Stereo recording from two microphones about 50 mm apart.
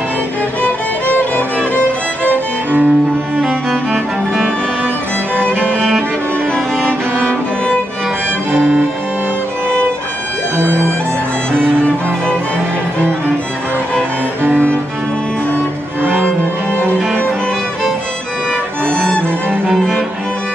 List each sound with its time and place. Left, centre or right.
1.0 s music: left
1.8 s music: right
3.4 s music: centre
6.5 s music: left
18.9 s music: centre